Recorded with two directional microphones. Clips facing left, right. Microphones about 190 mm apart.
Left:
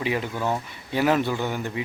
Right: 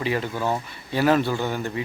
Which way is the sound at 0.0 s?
15° left (ahead or behind).